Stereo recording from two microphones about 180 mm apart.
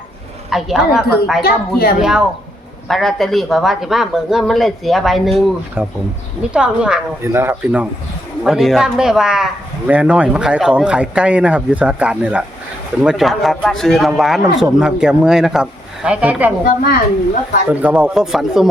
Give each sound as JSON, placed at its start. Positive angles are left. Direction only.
{"t": 0.5, "sound": "speech", "side_deg": 0}
{"t": 1.4, "sound": "a woman's voice", "side_deg": 60}
{"t": 2.0, "sound": "speech", "side_deg": -5}
{"t": 17.7, "sound": "speech", "side_deg": -10}